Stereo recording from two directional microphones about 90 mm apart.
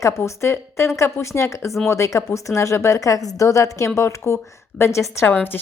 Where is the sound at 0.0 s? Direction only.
30° left (ahead or behind).